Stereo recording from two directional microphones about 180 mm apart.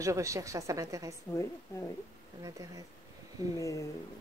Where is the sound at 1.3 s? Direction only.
15° left (ahead or behind).